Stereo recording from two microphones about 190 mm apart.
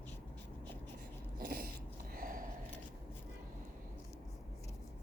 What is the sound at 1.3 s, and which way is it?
Dog, 50° right (ahead or behind).